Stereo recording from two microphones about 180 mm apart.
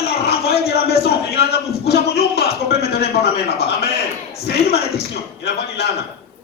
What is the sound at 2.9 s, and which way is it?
Speech, 60° left (ahead or behind).